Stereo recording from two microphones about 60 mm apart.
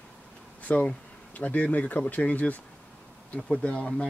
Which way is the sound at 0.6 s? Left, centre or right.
Left.